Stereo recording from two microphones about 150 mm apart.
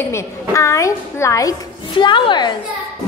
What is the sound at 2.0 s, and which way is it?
Speech, 30° left (ahead or behind).